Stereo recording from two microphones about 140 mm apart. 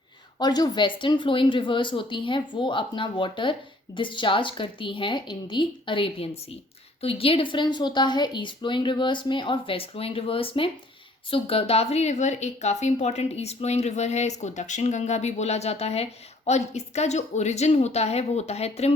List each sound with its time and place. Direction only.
0.3 s a woman's voice: 30° left (ahead or behind); by 18.9 s 50° left (ahead or behind)